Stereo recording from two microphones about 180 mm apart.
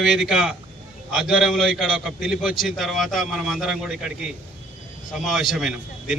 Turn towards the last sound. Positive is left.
turn(degrees=0)  # may be behind; listen again after turning